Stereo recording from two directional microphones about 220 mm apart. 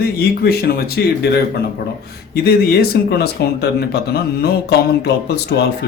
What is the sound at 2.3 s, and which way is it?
Speech, 45° left (ahead or behind).